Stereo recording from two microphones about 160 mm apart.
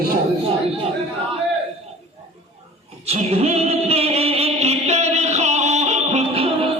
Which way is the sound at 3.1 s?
40° right (ahead or behind).